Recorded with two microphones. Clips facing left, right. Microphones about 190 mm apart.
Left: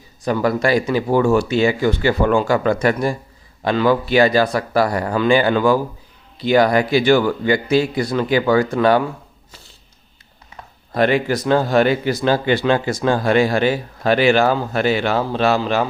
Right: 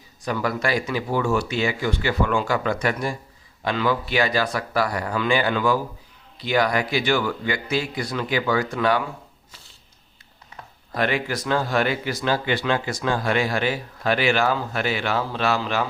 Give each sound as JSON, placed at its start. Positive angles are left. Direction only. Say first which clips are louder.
{"t": 0.3, "sound": "speech", "louder": "left 7 dB", "side_deg": 35}
{"t": 10.9, "sound": "speech", "louder": "left 7 dB", "side_deg": 30}